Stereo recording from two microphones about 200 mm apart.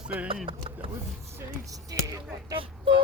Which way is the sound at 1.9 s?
15° right (ahead or behind).